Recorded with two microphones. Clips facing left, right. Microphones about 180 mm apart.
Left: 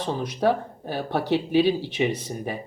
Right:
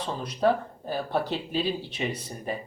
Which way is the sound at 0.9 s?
75° left (ahead or behind).